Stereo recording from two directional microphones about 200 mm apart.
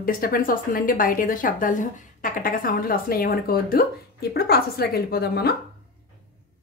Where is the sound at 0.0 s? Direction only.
45° left (ahead or behind).